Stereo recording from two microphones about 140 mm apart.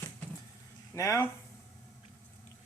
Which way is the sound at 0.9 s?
20° left (ahead or behind).